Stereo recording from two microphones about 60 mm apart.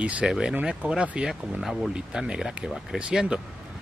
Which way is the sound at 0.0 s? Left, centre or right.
Centre.